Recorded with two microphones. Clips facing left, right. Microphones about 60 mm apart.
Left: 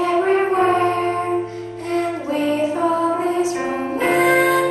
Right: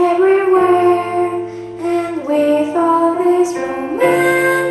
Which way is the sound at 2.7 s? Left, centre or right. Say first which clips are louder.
Right 6 dB; right.